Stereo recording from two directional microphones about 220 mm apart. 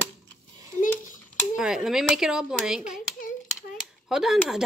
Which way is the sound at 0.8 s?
35° left (ahead or behind).